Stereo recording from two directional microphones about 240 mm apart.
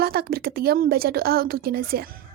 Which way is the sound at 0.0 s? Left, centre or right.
Right.